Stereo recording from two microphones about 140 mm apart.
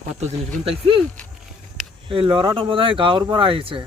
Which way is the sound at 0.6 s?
40° right (ahead or behind).